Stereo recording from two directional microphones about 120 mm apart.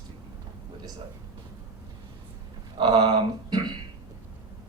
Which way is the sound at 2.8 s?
40° right (ahead or behind).